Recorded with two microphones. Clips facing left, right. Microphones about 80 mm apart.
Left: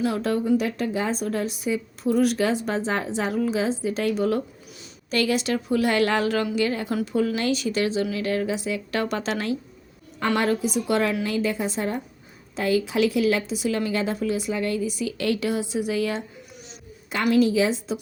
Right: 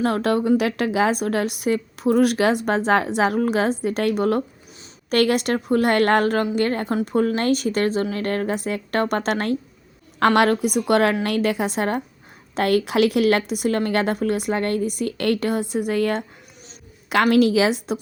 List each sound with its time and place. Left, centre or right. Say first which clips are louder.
0.0 s a woman's voice: right 4 dB; right
10.2 s a woman's voice: right 6 dB; right
17.3 s a woman's voice: even; right